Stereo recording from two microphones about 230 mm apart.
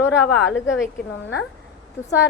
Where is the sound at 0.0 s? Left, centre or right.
Centre.